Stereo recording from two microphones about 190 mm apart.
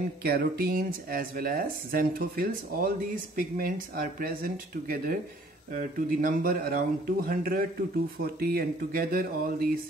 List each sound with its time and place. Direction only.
0.2 s speech: 55° right (ahead or behind)